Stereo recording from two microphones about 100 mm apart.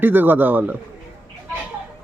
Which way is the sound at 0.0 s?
20° right (ahead or behind).